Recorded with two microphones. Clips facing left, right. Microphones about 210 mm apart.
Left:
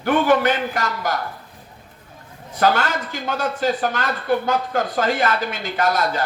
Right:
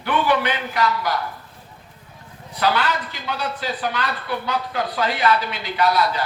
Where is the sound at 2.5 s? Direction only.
45° left (ahead or behind).